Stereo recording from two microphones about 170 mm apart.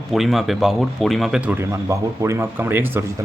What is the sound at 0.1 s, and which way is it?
Speech, centre (ahead or behind).